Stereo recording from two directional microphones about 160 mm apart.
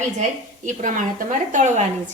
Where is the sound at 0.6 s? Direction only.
55° right (ahead or behind).